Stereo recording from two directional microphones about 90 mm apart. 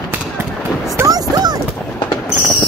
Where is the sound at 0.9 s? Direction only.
40° right (ahead or behind).